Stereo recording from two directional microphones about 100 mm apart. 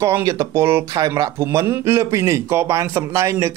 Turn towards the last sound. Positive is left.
turn(degrees=-30)  # may be behind; listen again after turning